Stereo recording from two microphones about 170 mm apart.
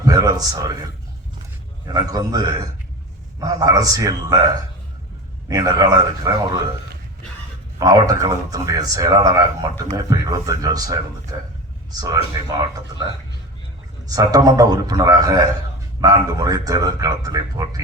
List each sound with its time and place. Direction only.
0.0 s a man's voice: 20° right (ahead or behind)
1.9 s a man's voice: 25° right (ahead or behind)
7.8 s a man's voice: 20° right (ahead or behind)
14.1 s a man's voice: 20° right (ahead or behind)